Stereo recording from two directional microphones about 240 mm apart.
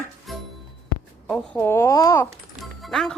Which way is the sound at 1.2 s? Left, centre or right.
Centre.